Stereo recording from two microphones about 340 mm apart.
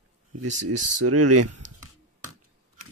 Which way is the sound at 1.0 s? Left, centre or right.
Right.